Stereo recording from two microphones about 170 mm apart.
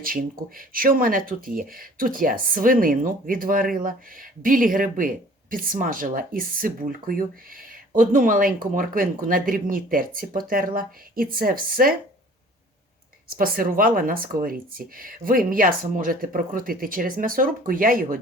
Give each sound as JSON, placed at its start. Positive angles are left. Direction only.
{"t": 0.0, "sound": "speech", "side_deg": -55}
{"t": 13.3, "sound": "speech", "side_deg": -55}